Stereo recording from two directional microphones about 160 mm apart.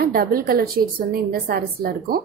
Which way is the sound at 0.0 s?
65° right (ahead or behind).